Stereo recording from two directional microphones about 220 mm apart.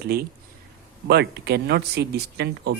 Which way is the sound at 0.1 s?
45° right (ahead or behind).